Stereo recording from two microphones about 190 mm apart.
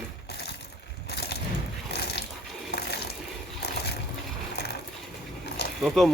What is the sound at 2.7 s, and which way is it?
Water, 60° left (ahead or behind).